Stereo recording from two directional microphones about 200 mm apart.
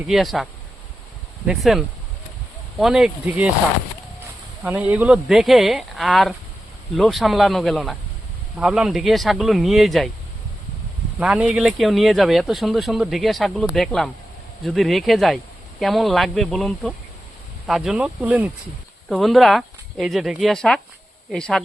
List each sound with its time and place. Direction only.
0.1 s speech: centre (ahead or behind)
1.5 s speech: centre (ahead or behind)
4.6 s speech: 5° right (ahead or behind)
11.2 s speech: 5° right (ahead or behind)